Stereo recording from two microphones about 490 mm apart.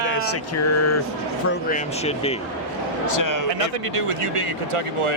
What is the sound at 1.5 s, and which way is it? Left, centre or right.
Speech, centre.